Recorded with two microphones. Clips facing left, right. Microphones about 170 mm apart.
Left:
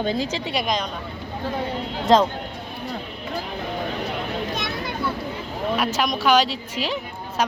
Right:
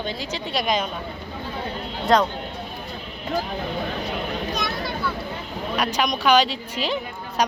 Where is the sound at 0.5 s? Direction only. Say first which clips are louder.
Right 3 dB; centre (ahead or behind).